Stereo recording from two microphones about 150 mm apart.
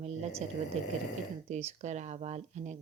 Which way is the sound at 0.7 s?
45° right (ahead or behind).